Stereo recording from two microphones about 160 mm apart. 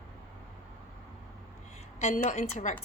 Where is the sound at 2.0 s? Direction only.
50° left (ahead or behind).